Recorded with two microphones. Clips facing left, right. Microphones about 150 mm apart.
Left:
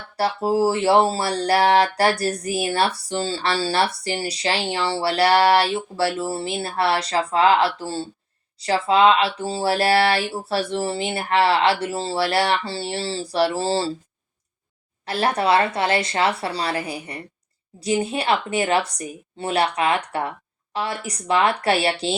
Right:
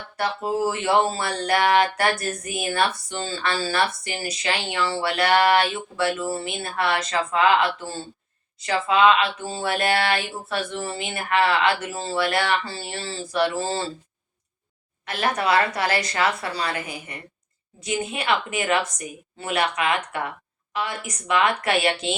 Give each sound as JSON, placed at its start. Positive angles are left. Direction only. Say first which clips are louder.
{"t": 0.2, "sound": "speech", "louder": "left 4 dB", "side_deg": 35}
{"t": 15.0, "sound": "speech", "louder": "left 3 dB", "side_deg": 35}